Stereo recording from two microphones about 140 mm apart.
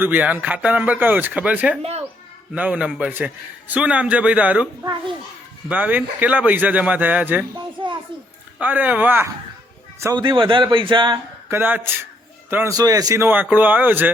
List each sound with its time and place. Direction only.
0.0 s a man's voice: 10° right (ahead or behind)
1.8 s a sound: 45° right (ahead or behind)
2.5 s a man's voice: 10° right (ahead or behind)
4.8 s speech: 30° right (ahead or behind)
5.6 s a man's voice: 10° right (ahead or behind)
7.8 s a sound: 35° right (ahead or behind)
8.5 s a man's voice: 10° right (ahead or behind)
10.2 s speech: 35° right (ahead or behind)
11.4 s a man's voice: 15° right (ahead or behind)
12.7 s a man's voice: 25° right (ahead or behind)